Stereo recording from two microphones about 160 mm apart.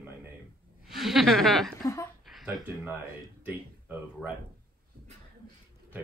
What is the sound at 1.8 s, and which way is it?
Speech, 20° left (ahead or behind).